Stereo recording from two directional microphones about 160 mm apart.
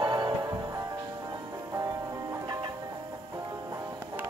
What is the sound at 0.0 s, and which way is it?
Music, 25° right (ahead or behind).